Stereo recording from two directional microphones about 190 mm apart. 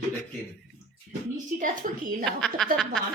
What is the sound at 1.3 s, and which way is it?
Speech, 45° right (ahead or behind).